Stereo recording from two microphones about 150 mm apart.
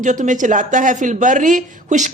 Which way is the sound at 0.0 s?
55° right (ahead or behind).